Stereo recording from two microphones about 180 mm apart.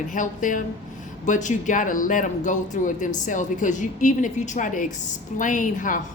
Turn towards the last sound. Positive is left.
turn(degrees=45)  # may be behind; listen again after turning